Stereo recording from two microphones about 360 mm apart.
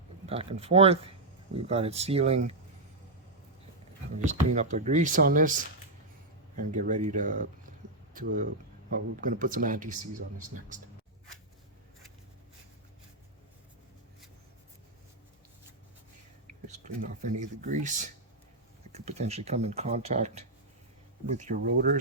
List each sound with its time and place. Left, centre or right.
0.3 s speech: centre
4.3 s speech: centre
6.8 s speech: right
16.6 s speech: centre